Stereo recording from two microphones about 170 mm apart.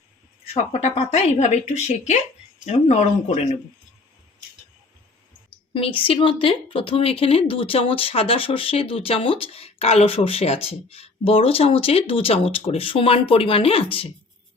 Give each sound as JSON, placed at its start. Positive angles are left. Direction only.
{"t": 0.4, "sound": "speech", "side_deg": 40}
{"t": 2.6, "sound": "speech", "side_deg": 40}
{"t": 5.7, "sound": "speech", "side_deg": 30}